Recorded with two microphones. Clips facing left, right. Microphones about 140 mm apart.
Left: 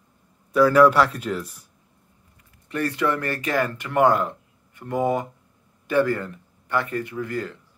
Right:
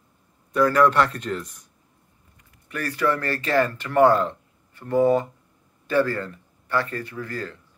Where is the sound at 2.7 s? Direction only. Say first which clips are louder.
Left 1 dB; 25° left (ahead or behind).